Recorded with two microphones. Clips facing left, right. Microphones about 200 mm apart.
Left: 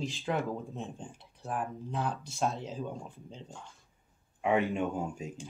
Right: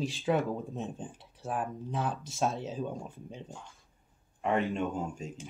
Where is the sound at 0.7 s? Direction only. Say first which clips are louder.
Right 3 dB; 15° right (ahead or behind).